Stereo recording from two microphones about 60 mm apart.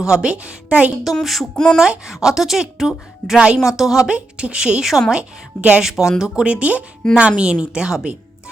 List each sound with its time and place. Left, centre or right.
0.0 s speech: centre
1.2 s child singing: centre
1.5 s speech: centre
1.8 s speech: centre